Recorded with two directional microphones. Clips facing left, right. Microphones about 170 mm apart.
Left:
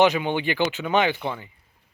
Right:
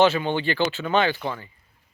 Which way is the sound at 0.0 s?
15° left (ahead or behind).